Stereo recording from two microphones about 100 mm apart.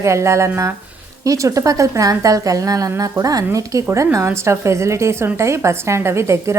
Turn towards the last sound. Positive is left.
turn(degrees=-30)  # may be behind; listen again after turning